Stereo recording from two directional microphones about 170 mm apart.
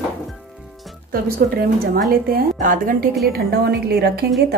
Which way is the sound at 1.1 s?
60° right (ahead or behind).